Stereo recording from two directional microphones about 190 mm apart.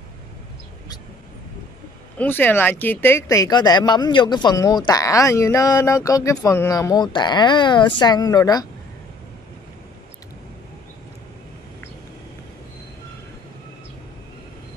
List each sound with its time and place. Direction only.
2.1 s speech: 10° left (ahead or behind)